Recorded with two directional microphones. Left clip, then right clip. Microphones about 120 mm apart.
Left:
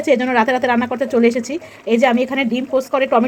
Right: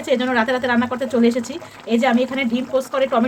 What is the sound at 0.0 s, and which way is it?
Speech, 40° left (ahead or behind).